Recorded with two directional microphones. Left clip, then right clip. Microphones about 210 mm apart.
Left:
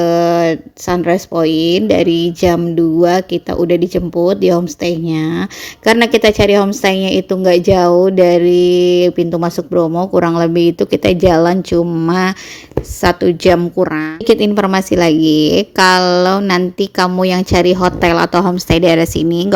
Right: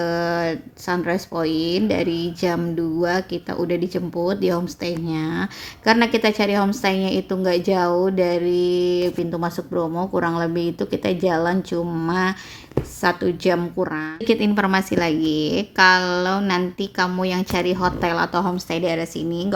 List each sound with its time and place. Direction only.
0.0 s a woman's voice: 30° left (ahead or behind)